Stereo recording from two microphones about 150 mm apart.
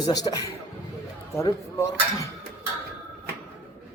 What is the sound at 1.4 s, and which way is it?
Speech, 20° left (ahead or behind).